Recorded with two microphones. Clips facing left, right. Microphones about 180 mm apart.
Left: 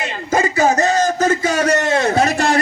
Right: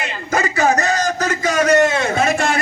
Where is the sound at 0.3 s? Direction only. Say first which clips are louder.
Left 2 dB; 25° left (ahead or behind).